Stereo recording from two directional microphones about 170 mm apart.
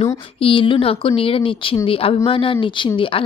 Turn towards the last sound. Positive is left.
turn(degrees=30)  # may be behind; listen again after turning